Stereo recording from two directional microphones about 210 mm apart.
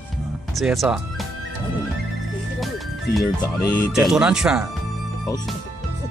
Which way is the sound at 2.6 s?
Centre (ahead or behind).